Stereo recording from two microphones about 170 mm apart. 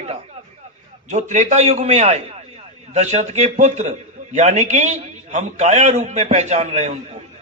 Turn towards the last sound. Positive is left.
turn(degrees=-40)  # may be behind; listen again after turning